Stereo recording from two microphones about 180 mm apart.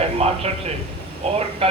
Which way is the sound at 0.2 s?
35° right (ahead or behind).